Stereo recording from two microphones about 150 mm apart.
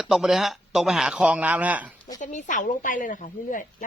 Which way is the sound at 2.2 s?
55° left (ahead or behind).